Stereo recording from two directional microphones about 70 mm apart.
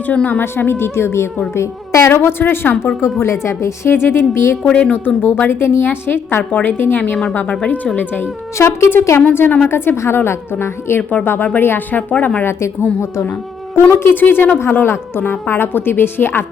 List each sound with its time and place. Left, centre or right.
0.1 s a woman's voice: left
4.6 s a woman's voice: centre
8.5 s a woman's voice: left
9.2 s a woman's voice: left
14.0 s a woman's voice: left